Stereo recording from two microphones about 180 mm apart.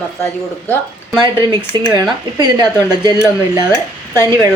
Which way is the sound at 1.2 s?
25° right (ahead or behind).